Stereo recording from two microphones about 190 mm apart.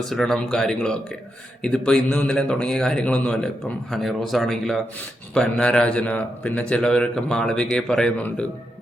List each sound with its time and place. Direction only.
0.1 s a man's voice: centre (ahead or behind)